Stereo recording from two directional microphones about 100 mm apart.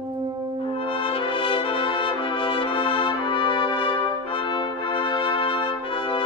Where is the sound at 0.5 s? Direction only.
60° left (ahead or behind).